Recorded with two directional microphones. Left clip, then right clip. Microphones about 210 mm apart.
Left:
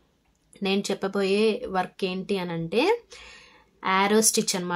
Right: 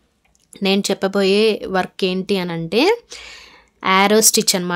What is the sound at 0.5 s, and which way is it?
Speech, 50° right (ahead or behind).